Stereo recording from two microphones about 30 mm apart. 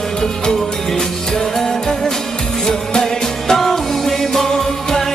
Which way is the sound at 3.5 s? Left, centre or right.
Centre.